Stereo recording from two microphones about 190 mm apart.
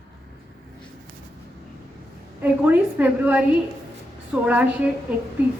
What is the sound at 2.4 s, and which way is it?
A woman's voice, 10° right (ahead or behind).